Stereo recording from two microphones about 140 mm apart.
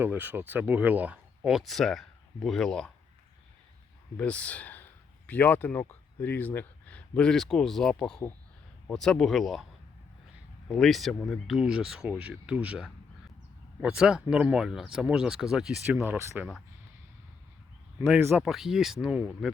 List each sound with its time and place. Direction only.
0.0 s speech: 15° right (ahead or behind); by 2.9 s 5° left (ahead or behind)
4.2 s speech: 10° left (ahead or behind)
10.7 s speech: centre (ahead or behind)
15.9 s speech: 15° right (ahead or behind)
18.1 s speech: 15° right (ahead or behind)
18.4 s speech: centre (ahead or behind)